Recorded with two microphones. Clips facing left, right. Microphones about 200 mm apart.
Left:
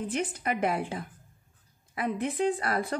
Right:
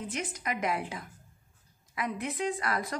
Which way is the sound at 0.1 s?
35° left (ahead or behind).